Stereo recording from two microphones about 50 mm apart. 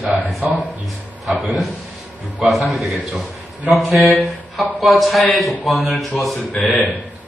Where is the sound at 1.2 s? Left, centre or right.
Centre.